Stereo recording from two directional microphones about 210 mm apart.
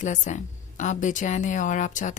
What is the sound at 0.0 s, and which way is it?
A woman's voice, 35° left (ahead or behind).